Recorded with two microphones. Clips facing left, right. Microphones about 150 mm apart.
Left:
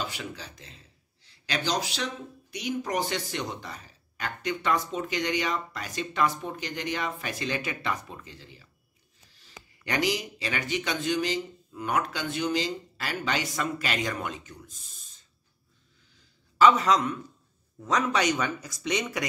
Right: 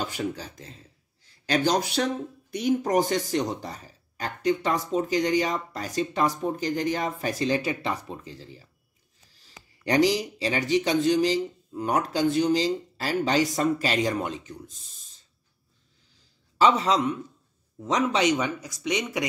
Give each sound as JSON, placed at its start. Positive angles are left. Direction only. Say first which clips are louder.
{"t": 0.0, "sound": "speech", "louder": "right 6 dB", "side_deg": -45}
{"t": 16.2, "sound": "a sound", "louder": "left 1 dB", "side_deg": -30}
{"t": 17.7, "sound": "speech", "louder": "right 2 dB", "side_deg": -20}